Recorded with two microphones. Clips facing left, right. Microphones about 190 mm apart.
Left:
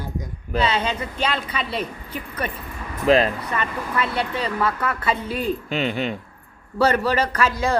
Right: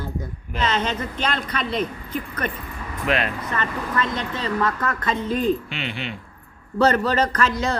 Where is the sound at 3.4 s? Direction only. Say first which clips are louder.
Even; 10° left (ahead or behind).